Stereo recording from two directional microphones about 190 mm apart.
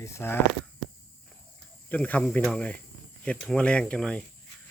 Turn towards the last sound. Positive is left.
turn(degrees=5)  # may be behind; listen again after turning